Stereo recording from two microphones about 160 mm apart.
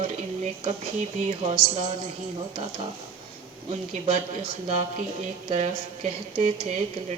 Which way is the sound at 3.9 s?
40° right (ahead or behind).